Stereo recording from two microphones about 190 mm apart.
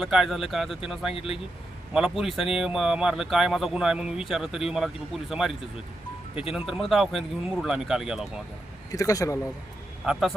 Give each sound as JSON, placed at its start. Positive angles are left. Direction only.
{"t": 0.0, "sound": "speech", "side_deg": 0}
{"t": 8.9, "sound": "speech", "side_deg": 20}
{"t": 10.1, "sound": "speech", "side_deg": 0}